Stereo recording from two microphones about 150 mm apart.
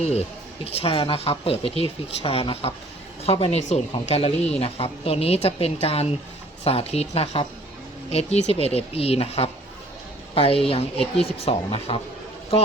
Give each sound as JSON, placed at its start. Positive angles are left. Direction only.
{"t": 0.0, "sound": "speech", "side_deg": 45}